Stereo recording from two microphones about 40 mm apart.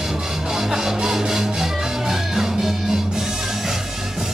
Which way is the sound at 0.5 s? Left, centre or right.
Centre.